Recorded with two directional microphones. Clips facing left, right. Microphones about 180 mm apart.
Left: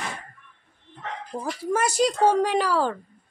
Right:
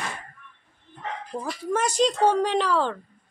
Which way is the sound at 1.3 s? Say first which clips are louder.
Left 1 dB; 20° left (ahead or behind).